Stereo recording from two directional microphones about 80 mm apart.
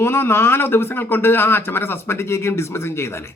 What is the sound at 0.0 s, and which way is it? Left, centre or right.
A man's voice, left.